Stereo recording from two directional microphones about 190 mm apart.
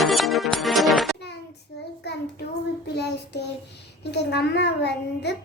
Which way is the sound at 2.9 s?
60° left (ahead or behind).